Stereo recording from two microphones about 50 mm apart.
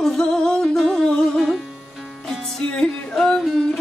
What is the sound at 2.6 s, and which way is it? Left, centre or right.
Music, left.